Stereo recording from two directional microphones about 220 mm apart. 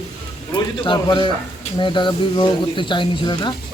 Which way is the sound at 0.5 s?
20° left (ahead or behind).